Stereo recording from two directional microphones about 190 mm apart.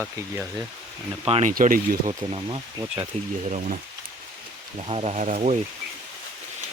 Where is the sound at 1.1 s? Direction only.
30° right (ahead or behind).